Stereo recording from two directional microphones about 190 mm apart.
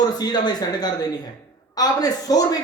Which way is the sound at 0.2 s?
20° left (ahead or behind).